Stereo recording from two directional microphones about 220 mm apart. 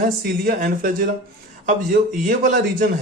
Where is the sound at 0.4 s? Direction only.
40° right (ahead or behind).